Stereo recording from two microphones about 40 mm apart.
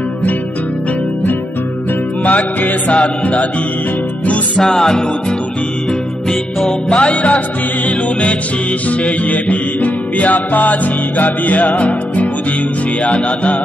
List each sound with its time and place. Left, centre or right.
2.2 s music: left
4.6 s music: centre
6.9 s music: left